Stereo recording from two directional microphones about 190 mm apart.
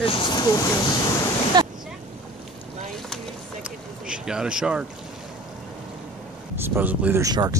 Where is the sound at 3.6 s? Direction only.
5° right (ahead or behind).